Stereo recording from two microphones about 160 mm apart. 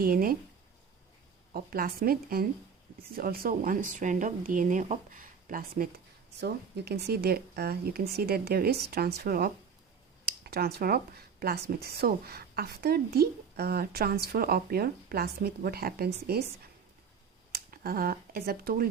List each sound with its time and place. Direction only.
0.0 s speech: 65° right (ahead or behind)
1.5 s speech: 65° right (ahead or behind)
6.4 s speech: 90° right
17.5 s speech: 65° right (ahead or behind)